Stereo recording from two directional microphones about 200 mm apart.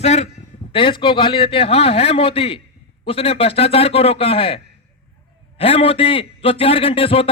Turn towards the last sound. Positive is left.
turn(degrees=25)  # may be behind; listen again after turning